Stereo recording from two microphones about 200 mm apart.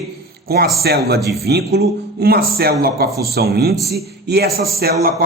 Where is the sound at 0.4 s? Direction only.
50° right (ahead or behind).